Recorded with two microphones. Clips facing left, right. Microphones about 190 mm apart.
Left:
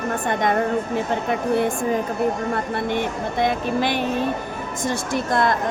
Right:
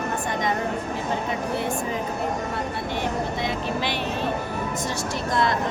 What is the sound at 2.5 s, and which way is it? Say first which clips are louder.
Speech: left 5 dB; 55° left (ahead or behind).